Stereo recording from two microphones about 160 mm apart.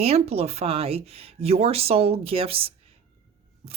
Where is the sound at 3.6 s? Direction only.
40° right (ahead or behind).